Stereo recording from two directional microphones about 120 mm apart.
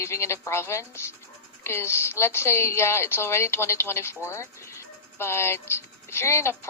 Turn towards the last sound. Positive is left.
turn(degrees=20)  # may be behind; listen again after turning